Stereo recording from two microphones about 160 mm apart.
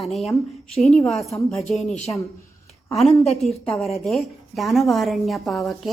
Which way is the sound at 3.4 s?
Centre (ahead or behind).